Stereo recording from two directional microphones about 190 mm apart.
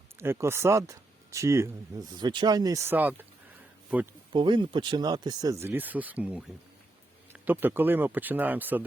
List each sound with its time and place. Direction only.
0.2 s speech: 15° right (ahead or behind)
4.3 s speech: 25° right (ahead or behind); by 6.4 s 5° right (ahead or behind)
7.4 s speech: 10° right (ahead or behind)